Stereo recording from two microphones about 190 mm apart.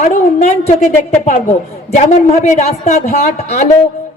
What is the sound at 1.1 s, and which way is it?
A woman's voice, 35° left (ahead or behind).